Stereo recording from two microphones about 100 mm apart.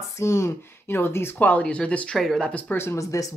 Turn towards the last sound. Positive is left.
turn(degrees=30)  # may be behind; listen again after turning